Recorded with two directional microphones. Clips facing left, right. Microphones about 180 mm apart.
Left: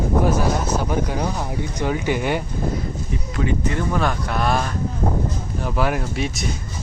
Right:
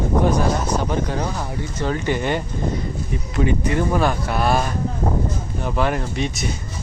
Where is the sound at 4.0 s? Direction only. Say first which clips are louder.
Right 2 dB; 5° right (ahead or behind).